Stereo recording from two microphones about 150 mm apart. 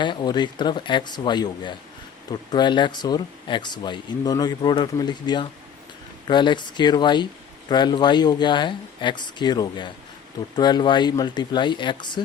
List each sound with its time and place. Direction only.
0.0 s speech: 30° left (ahead or behind)